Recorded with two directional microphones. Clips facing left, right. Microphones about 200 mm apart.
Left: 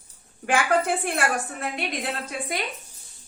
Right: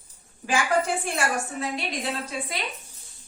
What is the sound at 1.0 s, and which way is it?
A woman's voice, 55° left (ahead or behind).